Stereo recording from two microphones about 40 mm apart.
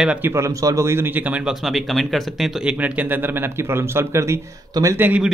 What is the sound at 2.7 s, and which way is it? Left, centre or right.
A man's voice, right.